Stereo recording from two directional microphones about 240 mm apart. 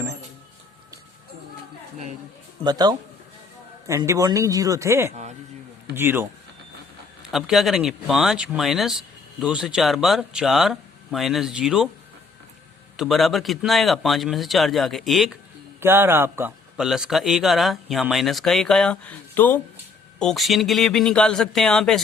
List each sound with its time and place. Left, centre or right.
2.6 s speech: centre
13.0 s speech: centre